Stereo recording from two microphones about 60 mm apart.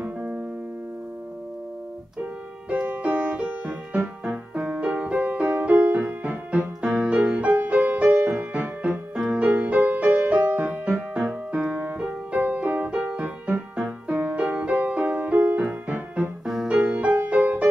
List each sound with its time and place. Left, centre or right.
0.0 s keyboard: right
2.7 s music: right
9.5 s music: right